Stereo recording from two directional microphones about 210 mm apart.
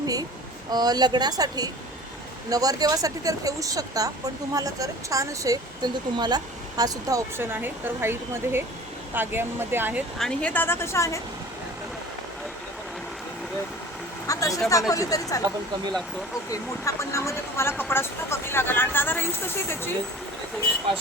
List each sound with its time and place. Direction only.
0.0 s speech: 15° right (ahead or behind)
10.2 s speech: 5° left (ahead or behind)
14.3 s speech: 15° left (ahead or behind)
16.8 s speech: 15° left (ahead or behind)